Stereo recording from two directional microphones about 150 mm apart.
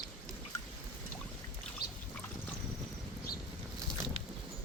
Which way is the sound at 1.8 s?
90° left.